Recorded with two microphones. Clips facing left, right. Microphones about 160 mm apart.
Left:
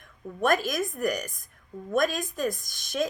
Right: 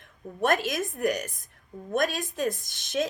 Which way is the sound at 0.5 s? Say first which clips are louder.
Left 1 dB; 25° right (ahead or behind).